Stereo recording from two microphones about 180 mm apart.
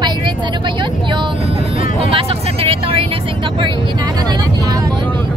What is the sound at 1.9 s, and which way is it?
Vehicle, 30° right (ahead or behind).